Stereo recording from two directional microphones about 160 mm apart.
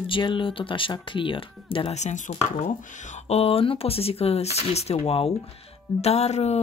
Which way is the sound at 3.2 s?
40° left (ahead or behind).